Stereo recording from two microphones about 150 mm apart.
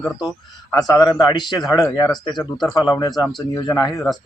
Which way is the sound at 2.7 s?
25° left (ahead or behind).